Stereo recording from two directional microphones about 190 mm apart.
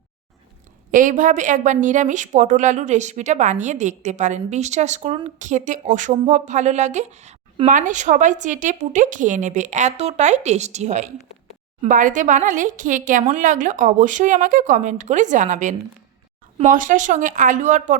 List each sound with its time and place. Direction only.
0.9 s a woman's voice: 45° right (ahead or behind)